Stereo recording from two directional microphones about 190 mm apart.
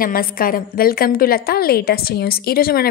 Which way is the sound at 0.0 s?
50° left (ahead or behind).